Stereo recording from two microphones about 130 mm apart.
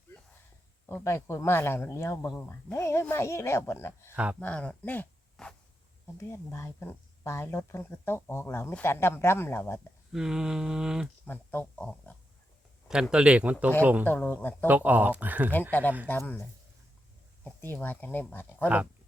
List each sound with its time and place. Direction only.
0.9 s speech: 20° left (ahead or behind)
4.1 s speech: 10° right (ahead or behind)
4.4 s speech: 10° left (ahead or behind)
6.1 s speech: 20° left (ahead or behind)
10.1 s a sound: 5° right (ahead or behind)
11.3 s speech: 10° left (ahead or behind)
12.9 s speech: 5° right (ahead or behind)
14.0 s speech: 15° left (ahead or behind)
14.7 s speech: 15° right (ahead or behind)
16.0 s speech: 15° left (ahead or behind)
17.4 s speech: 15° left (ahead or behind)